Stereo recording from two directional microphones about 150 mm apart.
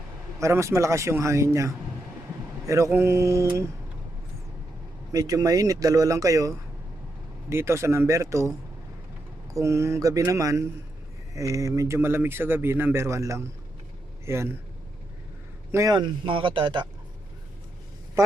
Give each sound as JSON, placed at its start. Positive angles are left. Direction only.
{"t": 0.3, "sound": "speech", "side_deg": -20}
{"t": 5.1, "sound": "speech", "side_deg": -25}
{"t": 15.7, "sound": "speech", "side_deg": -25}